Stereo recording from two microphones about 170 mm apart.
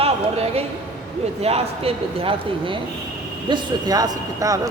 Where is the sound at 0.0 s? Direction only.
35° right (ahead or behind).